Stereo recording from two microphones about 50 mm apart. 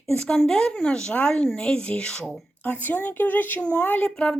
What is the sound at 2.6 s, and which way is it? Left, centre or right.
Speech, left.